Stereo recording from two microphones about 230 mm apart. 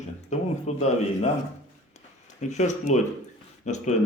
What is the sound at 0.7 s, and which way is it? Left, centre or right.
Speech, left.